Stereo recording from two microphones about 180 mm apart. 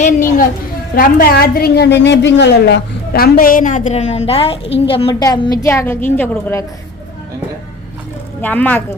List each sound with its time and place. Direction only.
0.0 s a woman's voice: 50° left (ahead or behind); by 6.7 s 15° left (ahead or behind)
8.4 s a woman's voice: 10° left (ahead or behind)